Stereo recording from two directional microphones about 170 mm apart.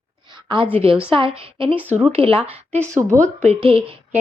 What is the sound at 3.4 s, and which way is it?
Speech, 35° right (ahead or behind).